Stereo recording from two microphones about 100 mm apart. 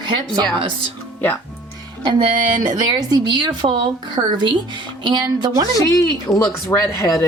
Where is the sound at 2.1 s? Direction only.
45° right (ahead or behind).